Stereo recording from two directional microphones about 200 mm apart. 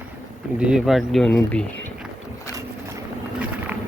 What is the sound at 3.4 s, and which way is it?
Vehicle, 10° right (ahead or behind).